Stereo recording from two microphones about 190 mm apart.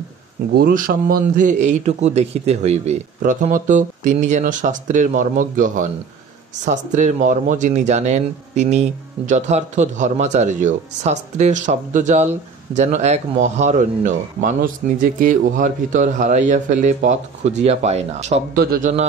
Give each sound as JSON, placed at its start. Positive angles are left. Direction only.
{"t": 0.6, "sound": "speech", "side_deg": -50}
{"t": 18.5, "sound": "a man's voice", "side_deg": -50}